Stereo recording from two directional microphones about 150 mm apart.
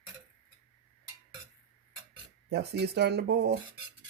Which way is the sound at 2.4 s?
90° right.